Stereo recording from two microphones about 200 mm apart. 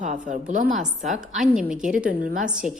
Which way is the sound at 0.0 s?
40° right (ahead or behind).